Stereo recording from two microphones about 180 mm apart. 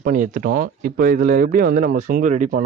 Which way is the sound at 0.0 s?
45° right (ahead or behind).